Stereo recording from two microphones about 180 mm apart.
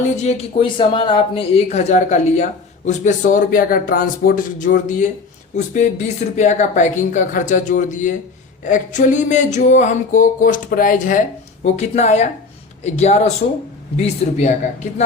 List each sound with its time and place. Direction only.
0.2 s speech: 35° left (ahead or behind)
5.5 s music: 45° left (ahead or behind)
12.8 s speech: 40° left (ahead or behind)